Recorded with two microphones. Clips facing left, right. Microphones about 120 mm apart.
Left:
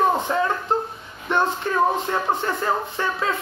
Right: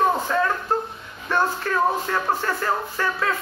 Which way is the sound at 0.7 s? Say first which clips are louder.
Left 2 dB; 20° left (ahead or behind).